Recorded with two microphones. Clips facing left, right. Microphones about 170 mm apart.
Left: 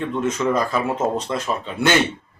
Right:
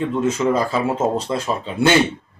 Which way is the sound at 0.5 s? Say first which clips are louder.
Right 2 dB; 25° right (ahead or behind).